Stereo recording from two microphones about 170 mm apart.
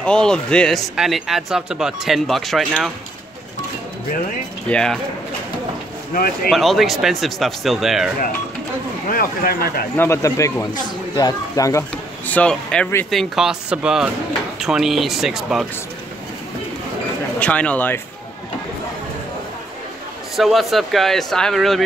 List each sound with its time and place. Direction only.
0.0 s speech: 5° left (ahead or behind)
4.6 s speech: 5° left (ahead or behind)
6.1 s speech: 60° left (ahead or behind)
6.5 s speech: centre (ahead or behind)
9.1 s speech: 55° left (ahead or behind)
9.9 s speech: 15° left (ahead or behind)
12.3 s speech: 5° left (ahead or behind)
17.4 s speech: 10° left (ahead or behind)
20.3 s speech: centre (ahead or behind)